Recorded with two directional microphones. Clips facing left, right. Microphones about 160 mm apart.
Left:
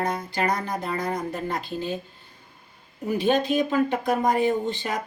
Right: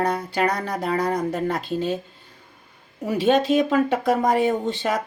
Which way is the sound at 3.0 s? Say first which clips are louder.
Right 3 dB; 90° right.